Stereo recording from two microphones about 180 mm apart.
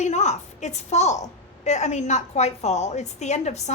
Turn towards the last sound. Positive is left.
turn(degrees=40)  # may be behind; listen again after turning